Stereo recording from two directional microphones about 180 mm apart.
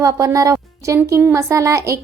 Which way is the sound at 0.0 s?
15° right (ahead or behind).